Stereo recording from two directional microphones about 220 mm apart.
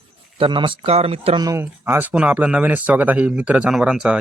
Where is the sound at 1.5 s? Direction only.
10° right (ahead or behind).